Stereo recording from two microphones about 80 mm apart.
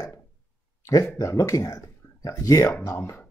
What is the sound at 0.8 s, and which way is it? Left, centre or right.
Speech, left.